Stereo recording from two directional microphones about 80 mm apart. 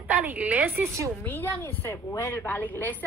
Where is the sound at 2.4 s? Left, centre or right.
Left.